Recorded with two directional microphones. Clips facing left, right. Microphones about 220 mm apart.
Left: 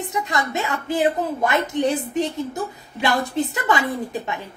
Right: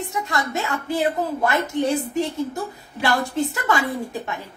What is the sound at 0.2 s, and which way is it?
A woman's voice, 20° left (ahead or behind).